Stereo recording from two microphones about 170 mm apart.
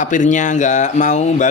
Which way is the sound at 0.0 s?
45° left (ahead or behind).